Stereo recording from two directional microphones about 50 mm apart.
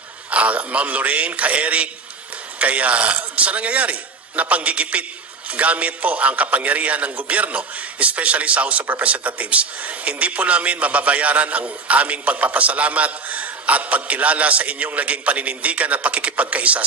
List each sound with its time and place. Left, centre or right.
0.3 s a man's voice: right